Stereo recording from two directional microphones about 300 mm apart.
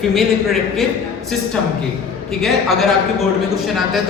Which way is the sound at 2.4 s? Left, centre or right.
Centre.